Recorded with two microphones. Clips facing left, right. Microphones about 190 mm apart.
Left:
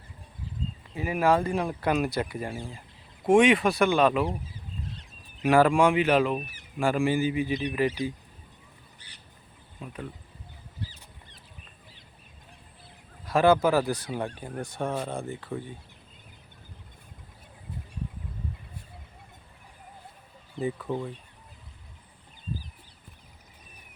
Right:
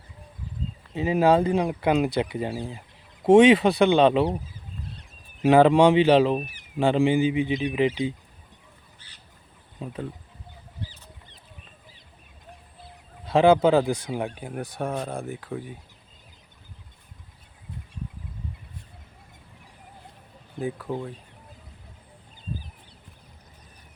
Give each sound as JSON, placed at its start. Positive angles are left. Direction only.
{"t": 0.9, "sound": "speech", "side_deg": -25}
{"t": 5.4, "sound": "speech", "side_deg": -20}
{"t": 9.0, "sound": "bird", "side_deg": 15}
{"t": 9.8, "sound": "speech", "side_deg": -25}
{"t": 13.2, "sound": "speech", "side_deg": -20}
{"t": 20.6, "sound": "speech", "side_deg": 0}